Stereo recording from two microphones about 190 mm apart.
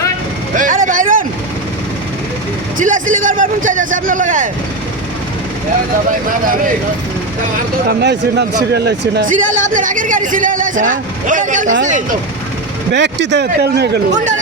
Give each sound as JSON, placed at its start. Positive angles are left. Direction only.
{"t": 0.5, "sound": "vehicle", "side_deg": -45}
{"t": 2.7, "sound": "speech", "side_deg": -45}
{"t": 7.9, "sound": "a man's voice", "side_deg": -65}
{"t": 9.5, "sound": "speech", "side_deg": -40}
{"t": 12.9, "sound": "a man's voice", "side_deg": -65}